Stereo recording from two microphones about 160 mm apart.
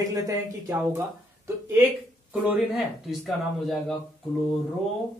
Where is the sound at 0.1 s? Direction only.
20° right (ahead or behind).